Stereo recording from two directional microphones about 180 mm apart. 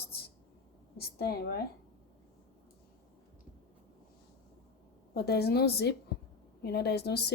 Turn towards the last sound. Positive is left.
turn(degrees=65)  # may be behind; listen again after turning